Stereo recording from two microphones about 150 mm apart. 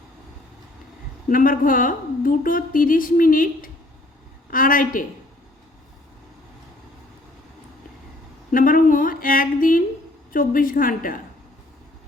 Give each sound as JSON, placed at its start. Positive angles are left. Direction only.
{"t": 1.3, "sound": "a woman's voice", "side_deg": 65}
{"t": 8.5, "sound": "a woman's voice", "side_deg": 65}